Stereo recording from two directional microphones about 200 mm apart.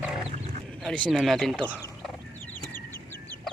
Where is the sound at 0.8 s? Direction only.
5° left (ahead or behind).